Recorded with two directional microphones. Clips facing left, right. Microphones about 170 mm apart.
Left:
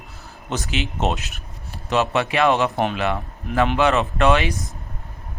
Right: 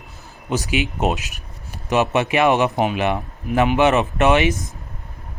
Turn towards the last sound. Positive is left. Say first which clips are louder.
# right 2 dB
turn(degrees=-20)  # may be behind; listen again after turning